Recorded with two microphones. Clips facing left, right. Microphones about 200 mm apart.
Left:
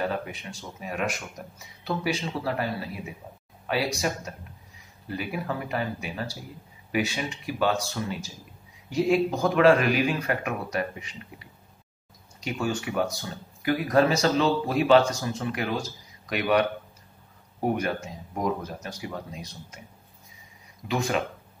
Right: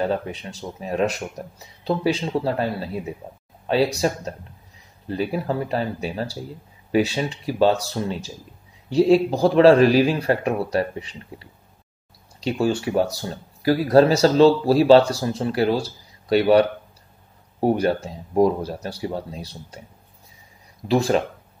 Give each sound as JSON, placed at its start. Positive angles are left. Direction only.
{"t": 0.0, "sound": "a man's voice", "side_deg": -30}
{"t": 20.9, "sound": "speech", "side_deg": -35}